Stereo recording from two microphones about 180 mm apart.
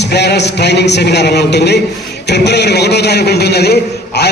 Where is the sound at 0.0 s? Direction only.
70° left (ahead or behind).